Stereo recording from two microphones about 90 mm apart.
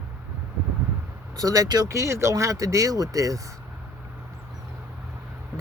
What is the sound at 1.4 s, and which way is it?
Speech, 40° right (ahead or behind).